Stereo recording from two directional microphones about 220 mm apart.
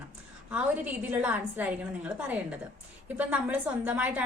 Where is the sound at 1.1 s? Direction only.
10° right (ahead or behind).